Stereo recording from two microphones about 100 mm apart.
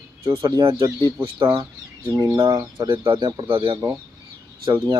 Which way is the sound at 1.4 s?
50° right (ahead or behind).